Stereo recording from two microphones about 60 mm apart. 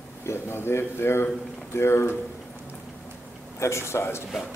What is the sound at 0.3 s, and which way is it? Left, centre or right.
A man's voice, left.